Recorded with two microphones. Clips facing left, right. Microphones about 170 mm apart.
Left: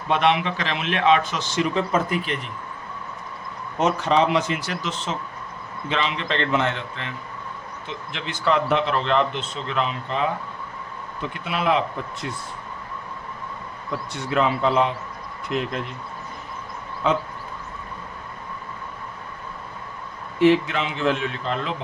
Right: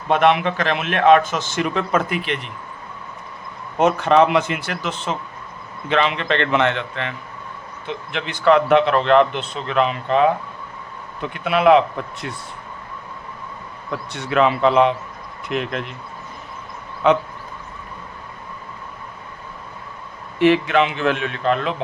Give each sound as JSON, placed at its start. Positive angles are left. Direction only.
{"t": 0.1, "sound": "speech", "side_deg": -50}
{"t": 3.8, "sound": "speech", "side_deg": -60}
{"t": 13.9, "sound": "a man's voice", "side_deg": -65}
{"t": 17.0, "sound": "a man's voice", "side_deg": -70}
{"t": 20.4, "sound": "speech", "side_deg": -70}